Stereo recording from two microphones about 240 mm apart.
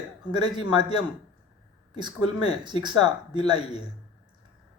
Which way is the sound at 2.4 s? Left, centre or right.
Centre.